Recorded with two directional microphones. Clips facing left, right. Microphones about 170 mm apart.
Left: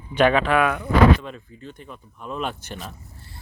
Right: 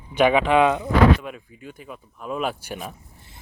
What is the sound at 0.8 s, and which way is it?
Speech, 10° right (ahead or behind).